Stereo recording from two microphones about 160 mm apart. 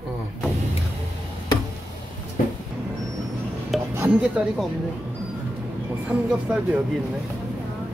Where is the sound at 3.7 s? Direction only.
Centre (ahead or behind).